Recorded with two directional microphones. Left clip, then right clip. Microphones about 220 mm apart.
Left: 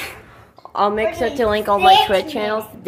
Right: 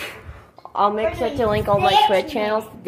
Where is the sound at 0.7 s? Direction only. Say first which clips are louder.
Left 1 dB; 10° left (ahead or behind).